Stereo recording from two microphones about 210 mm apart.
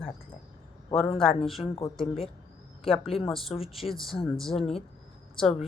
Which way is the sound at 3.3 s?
Centre (ahead or behind).